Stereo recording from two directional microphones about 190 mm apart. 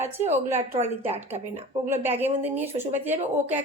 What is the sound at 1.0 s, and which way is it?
Speech, 35° right (ahead or behind).